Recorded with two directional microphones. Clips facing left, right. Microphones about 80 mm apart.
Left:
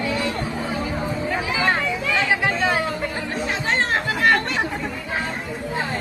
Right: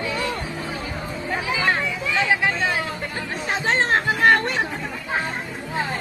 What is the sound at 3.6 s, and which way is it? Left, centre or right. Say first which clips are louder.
Chatter: right 3 dB; right.